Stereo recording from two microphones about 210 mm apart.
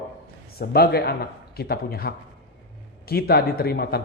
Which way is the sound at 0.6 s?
50° left (ahead or behind).